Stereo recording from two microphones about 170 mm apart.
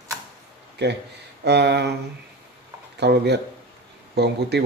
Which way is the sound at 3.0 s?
80° right.